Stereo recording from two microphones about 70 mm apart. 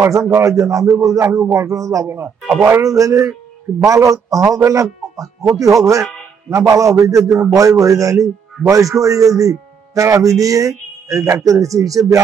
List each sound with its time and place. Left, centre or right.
0.3 s a man's voice: right
2.0 s a man's voice: right